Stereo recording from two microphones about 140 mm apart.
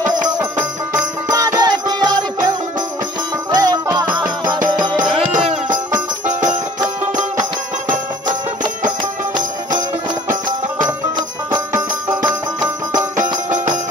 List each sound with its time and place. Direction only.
0.4 s music: 15° right (ahead or behind)
1.3 s music: 25° right (ahead or behind)
4.0 s music: 15° right (ahead or behind)
6.2 s music: 60° right (ahead or behind)
10.8 s music: 30° right (ahead or behind)
11.7 s music: 20° right (ahead or behind)